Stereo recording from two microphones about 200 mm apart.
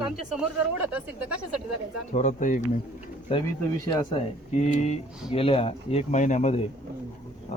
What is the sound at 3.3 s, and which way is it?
Speech, 30° left (ahead or behind).